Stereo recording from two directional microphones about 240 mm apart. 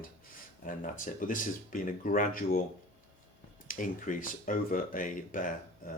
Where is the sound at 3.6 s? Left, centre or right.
Left.